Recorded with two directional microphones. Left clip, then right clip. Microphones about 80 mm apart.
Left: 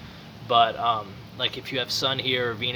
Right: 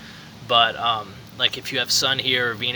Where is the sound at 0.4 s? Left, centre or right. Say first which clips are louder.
Right 2 dB; centre.